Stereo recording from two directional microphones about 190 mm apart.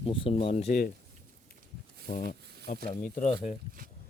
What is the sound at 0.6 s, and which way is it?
Speech, 50° left (ahead or behind).